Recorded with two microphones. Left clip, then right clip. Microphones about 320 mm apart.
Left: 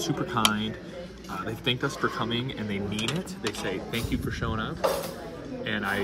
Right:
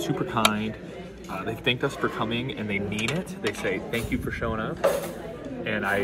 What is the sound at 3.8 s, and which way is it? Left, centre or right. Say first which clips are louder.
Speech: right 2 dB; right.